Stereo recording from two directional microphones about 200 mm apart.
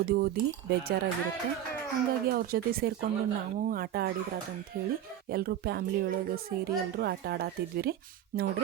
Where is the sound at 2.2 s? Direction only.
50° right (ahead or behind).